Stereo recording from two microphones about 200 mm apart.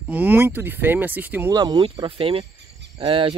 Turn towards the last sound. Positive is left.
turn(degrees=-25)  # may be behind; listen again after turning